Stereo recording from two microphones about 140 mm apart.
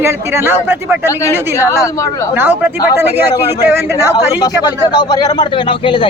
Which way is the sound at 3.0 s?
15° right (ahead or behind).